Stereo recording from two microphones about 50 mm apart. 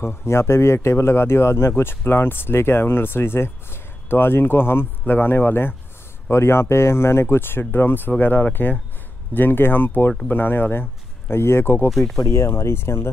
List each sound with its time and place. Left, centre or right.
0.0 s speech: left
6.3 s speech: left
11.9 s speech: centre
12.3 s speech: left